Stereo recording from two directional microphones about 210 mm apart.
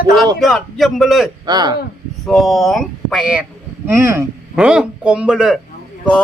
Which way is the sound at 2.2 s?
Centre (ahead or behind).